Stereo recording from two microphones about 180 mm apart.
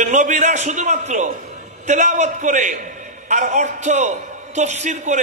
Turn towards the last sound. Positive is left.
turn(degrees=-40)  # may be behind; listen again after turning